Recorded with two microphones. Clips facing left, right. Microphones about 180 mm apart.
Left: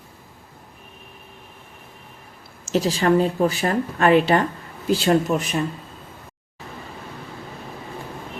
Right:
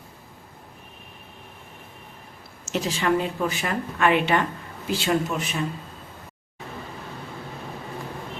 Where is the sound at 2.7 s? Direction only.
35° left (ahead or behind).